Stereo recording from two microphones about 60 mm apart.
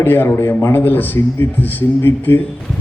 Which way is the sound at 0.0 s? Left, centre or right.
Left.